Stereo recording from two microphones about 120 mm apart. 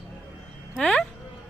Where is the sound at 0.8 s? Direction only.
5° left (ahead or behind).